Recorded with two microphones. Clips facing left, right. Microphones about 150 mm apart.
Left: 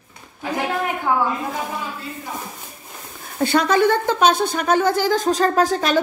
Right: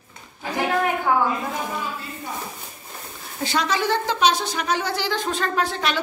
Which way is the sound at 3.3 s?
55° left (ahead or behind).